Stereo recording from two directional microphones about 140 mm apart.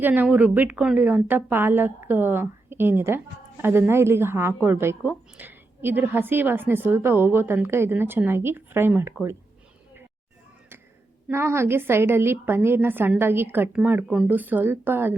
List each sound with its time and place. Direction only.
0.0 s a woman's voice: 15° right (ahead or behind)
11.3 s a woman's voice: 20° right (ahead or behind)